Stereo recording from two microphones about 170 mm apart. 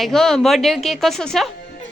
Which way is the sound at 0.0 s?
Centre (ahead or behind).